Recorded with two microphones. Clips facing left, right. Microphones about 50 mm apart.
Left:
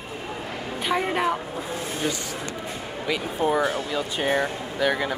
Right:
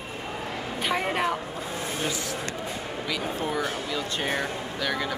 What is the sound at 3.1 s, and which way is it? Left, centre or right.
Speech, centre.